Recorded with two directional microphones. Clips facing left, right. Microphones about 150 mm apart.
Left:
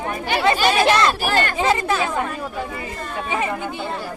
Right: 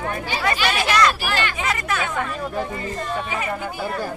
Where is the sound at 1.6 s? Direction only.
30° left (ahead or behind).